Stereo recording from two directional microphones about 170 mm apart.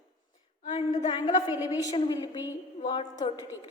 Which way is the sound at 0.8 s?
45° left (ahead or behind).